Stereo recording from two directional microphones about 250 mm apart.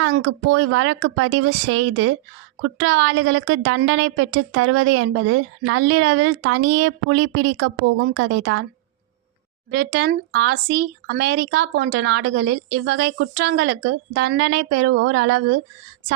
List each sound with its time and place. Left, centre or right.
0.0 s a woman's voice: right
9.7 s a woman's voice: right